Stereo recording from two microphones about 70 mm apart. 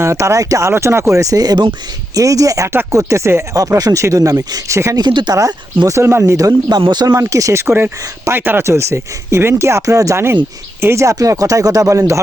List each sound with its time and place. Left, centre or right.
0.0 s speech: right
0.7 s speech: right
2.1 s speech: right
3.6 s speech: right
4.9 s speech: right
5.9 s speech: right
6.7 s speech: right
7.1 s speech: right
8.3 s speech: right
8.6 s speech: right